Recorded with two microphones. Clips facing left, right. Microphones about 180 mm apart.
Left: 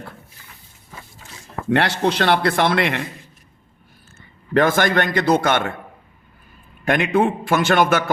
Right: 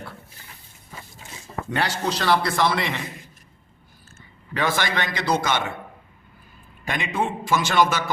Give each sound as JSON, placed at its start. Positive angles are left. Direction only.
{"t": 1.7, "sound": "a man's voice", "side_deg": 65}
{"t": 4.5, "sound": "a man's voice", "side_deg": 50}
{"t": 6.8, "sound": "a man's voice", "side_deg": 55}